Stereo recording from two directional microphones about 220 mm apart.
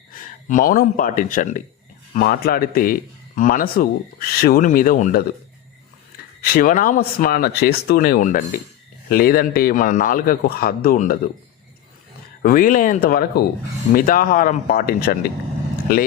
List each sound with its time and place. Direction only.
0.1 s speech: 35° left (ahead or behind)
6.4 s speech: 40° left (ahead or behind)
12.4 s speech: 40° left (ahead or behind)